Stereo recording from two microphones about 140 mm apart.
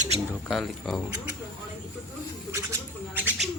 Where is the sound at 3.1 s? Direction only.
15° right (ahead or behind).